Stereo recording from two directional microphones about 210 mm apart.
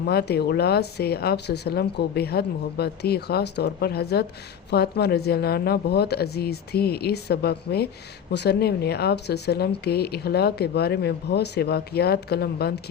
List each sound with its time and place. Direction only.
0.0 s speech: 50° left (ahead or behind)